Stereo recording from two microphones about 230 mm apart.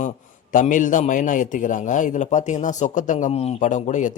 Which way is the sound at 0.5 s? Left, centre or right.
Left.